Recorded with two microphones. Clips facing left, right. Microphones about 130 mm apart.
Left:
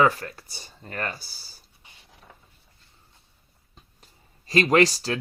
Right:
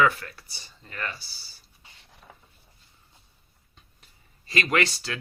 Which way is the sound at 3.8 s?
35° left (ahead or behind).